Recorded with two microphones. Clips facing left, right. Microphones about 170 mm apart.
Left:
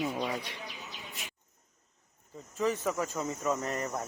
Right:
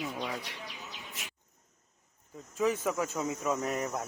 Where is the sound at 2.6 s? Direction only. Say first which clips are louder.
Right 1 dB; 5° right (ahead or behind).